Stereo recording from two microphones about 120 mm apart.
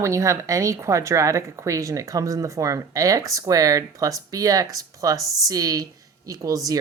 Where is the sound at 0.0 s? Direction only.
25° right (ahead or behind).